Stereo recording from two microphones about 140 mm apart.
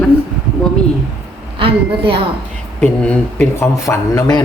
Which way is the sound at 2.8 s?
10° left (ahead or behind).